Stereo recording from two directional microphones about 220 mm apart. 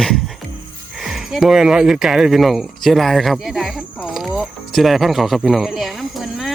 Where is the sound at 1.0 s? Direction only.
Centre (ahead or behind).